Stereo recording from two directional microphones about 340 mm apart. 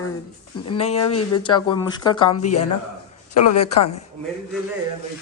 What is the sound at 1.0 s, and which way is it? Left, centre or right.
Speech, left.